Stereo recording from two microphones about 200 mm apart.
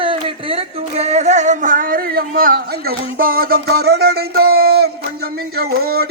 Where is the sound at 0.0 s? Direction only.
25° right (ahead or behind).